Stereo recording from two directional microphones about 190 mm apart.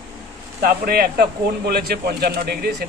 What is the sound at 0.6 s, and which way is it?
Speech, 50° right (ahead or behind).